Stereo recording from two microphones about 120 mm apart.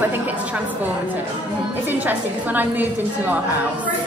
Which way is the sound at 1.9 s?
15° right (ahead or behind).